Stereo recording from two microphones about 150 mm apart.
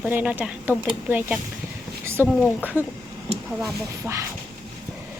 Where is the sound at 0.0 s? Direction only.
10° right (ahead or behind).